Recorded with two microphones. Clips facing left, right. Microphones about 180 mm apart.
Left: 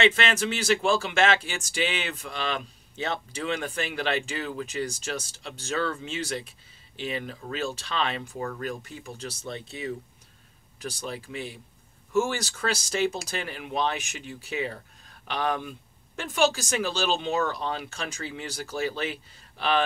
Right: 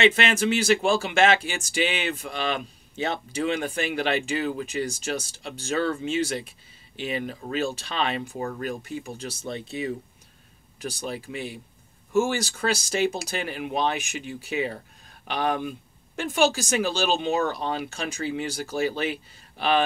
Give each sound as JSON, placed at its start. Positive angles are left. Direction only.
{"t": 0.0, "sound": "speech", "side_deg": -15}
{"t": 8.3, "sound": "speech", "side_deg": -25}
{"t": 11.1, "sound": "speech", "side_deg": -10}